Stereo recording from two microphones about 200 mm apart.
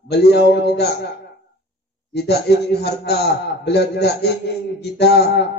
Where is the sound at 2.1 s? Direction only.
55° left (ahead or behind).